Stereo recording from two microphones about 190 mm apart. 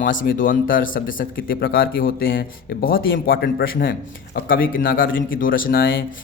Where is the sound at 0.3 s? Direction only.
45° left (ahead or behind).